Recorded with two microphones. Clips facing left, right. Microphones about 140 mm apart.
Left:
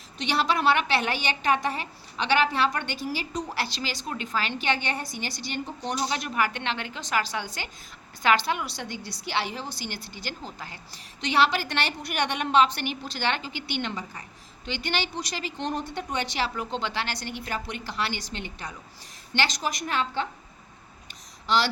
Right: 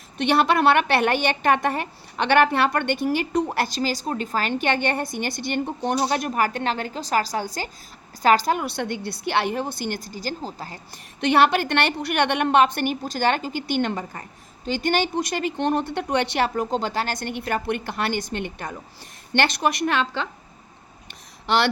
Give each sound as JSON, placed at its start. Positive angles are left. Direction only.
{"t": 0.2, "sound": "a woman's voice", "side_deg": -55}
{"t": 10.9, "sound": "a woman's voice", "side_deg": -55}
{"t": 16.6, "sound": "a woman's voice", "side_deg": -45}
{"t": 21.4, "sound": "speech", "side_deg": -60}